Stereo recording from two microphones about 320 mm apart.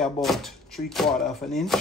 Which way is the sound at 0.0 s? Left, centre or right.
Centre.